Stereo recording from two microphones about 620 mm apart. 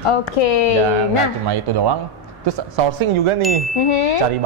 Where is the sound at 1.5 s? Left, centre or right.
Right.